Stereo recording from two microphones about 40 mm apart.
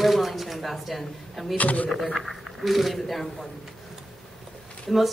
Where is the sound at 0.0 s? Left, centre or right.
Centre.